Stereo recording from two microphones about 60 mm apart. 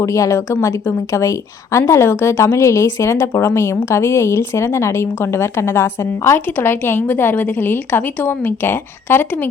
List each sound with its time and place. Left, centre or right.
0.0 s a woman's voice: left
1.9 s a woman's voice: left